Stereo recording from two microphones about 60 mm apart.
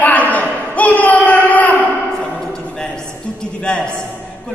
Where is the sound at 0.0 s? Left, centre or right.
Left.